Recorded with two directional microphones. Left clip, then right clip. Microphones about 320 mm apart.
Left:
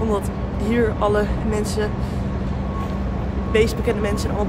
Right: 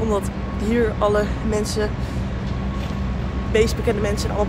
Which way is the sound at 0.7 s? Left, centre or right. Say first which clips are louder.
Even; centre.